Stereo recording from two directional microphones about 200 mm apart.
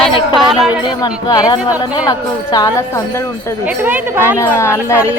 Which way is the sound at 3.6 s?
10° right (ahead or behind).